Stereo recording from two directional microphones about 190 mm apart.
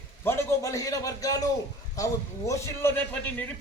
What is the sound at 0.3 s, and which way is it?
A man's voice, 15° left (ahead or behind).